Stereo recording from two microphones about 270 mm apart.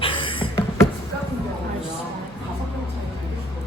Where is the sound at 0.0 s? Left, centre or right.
Centre.